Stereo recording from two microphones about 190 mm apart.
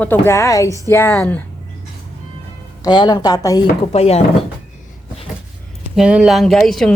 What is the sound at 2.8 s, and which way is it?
Speech, 25° left (ahead or behind).